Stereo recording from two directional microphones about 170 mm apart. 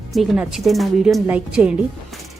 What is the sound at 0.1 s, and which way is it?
A woman's voice, centre (ahead or behind).